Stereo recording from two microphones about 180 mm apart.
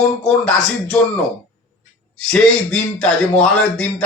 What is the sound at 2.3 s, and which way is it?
A man's voice, 5° left (ahead or behind).